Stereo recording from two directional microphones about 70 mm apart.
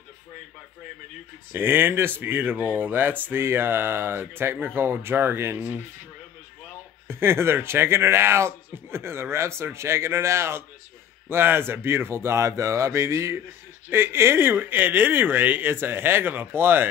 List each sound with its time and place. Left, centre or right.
1.5 s speech: right
7.1 s speech: right